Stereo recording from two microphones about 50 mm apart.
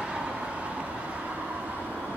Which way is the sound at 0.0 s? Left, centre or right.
Centre.